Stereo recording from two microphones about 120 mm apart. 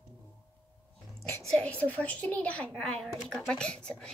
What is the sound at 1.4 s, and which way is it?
Speech, 5° left (ahead or behind).